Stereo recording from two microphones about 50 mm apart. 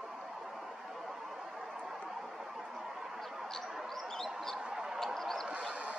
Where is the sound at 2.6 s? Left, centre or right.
Centre.